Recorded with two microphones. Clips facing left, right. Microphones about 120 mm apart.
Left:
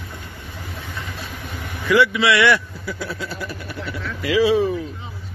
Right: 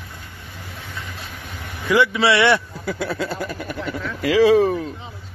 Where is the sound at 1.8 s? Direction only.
20° right (ahead or behind).